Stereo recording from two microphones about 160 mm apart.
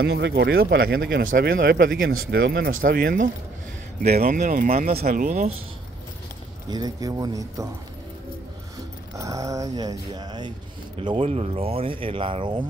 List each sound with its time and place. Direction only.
0.0 s speech: 90° right; by 5.5 s 50° right (ahead or behind)
6.7 s speech: 25° right (ahead or behind)
9.2 s speech: 20° right (ahead or behind)